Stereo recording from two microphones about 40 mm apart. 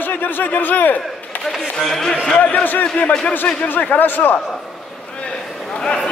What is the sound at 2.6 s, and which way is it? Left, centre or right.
Speech, left.